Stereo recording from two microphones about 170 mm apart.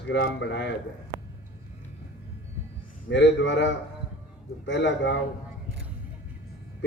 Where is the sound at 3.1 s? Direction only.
90° left.